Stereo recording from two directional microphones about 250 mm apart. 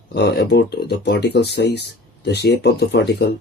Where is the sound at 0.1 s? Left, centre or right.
Left.